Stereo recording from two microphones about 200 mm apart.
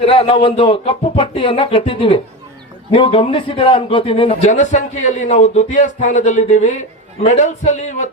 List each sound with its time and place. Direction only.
0.0 s a man's voice: 30° left (ahead or behind)